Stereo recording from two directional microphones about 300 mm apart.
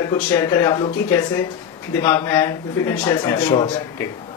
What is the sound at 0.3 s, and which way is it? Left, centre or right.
A woman's voice, centre.